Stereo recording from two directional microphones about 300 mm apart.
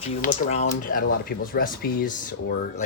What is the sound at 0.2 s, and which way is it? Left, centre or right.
Speech, left.